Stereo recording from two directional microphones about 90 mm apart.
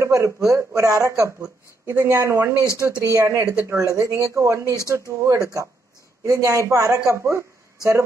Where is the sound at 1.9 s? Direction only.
30° right (ahead or behind).